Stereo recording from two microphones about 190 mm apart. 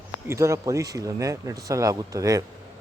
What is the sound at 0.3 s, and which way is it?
Speech, 15° right (ahead or behind).